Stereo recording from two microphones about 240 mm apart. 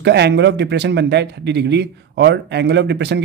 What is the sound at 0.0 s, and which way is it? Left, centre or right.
Speech, right.